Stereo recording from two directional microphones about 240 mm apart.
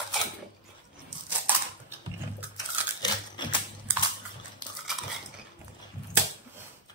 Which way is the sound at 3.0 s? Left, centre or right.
Centre.